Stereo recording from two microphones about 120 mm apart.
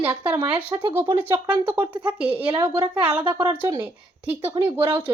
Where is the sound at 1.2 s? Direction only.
15° right (ahead or behind).